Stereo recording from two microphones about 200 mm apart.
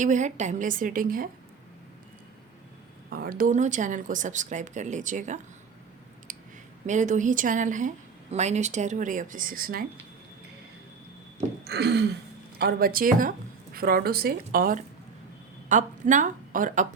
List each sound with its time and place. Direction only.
0.0 s a woman's voice: 40° right (ahead or behind)
3.1 s a woman's voice: 45° right (ahead or behind)
6.3 s clicking: 40° right (ahead or behind)
6.8 s a woman's voice: 40° right (ahead or behind)
11.6 s a sound: 55° right (ahead or behind)
12.5 s a woman's voice: 50° right (ahead or behind)